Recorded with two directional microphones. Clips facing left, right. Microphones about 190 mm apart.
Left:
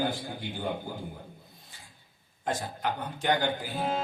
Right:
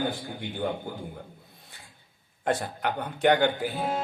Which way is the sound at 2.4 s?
60° right (ahead or behind).